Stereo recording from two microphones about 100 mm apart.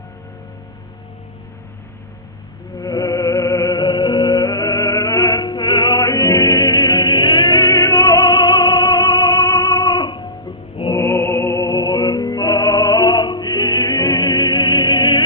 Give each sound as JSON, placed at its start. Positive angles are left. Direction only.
{"t": 2.7, "sound": "music", "side_deg": 35}
{"t": 6.0, "sound": "music", "side_deg": 25}
{"t": 6.7, "sound": "music", "side_deg": 55}
{"t": 7.7, "sound": "music", "side_deg": 30}
{"t": 8.0, "sound": "music", "side_deg": 45}
{"t": 9.2, "sound": "music", "side_deg": 25}
{"t": 9.6, "sound": "music", "side_deg": 40}
{"t": 10.9, "sound": "music", "side_deg": 25}